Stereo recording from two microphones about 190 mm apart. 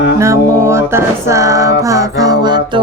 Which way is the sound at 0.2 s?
15° right (ahead or behind).